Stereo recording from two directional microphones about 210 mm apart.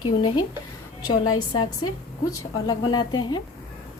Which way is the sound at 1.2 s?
90° left.